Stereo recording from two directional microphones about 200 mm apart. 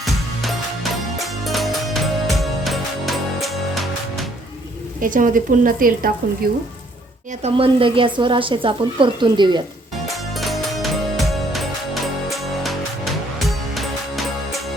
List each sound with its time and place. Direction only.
0.0 s music: centre (ahead or behind)
4.9 s speech: 40° right (ahead or behind)
7.4 s speech: 25° right (ahead or behind)
10.3 s music: centre (ahead or behind)